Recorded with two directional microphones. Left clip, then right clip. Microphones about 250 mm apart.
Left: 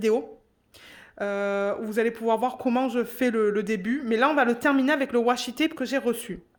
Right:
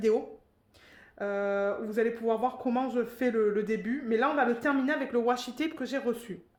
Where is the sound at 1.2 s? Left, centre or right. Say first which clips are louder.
Left 3 dB; left.